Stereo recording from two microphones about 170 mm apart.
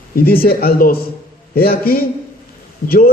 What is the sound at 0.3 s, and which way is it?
A man's voice, 60° left (ahead or behind).